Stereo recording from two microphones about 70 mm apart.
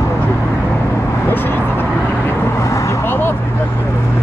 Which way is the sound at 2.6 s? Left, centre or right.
Left.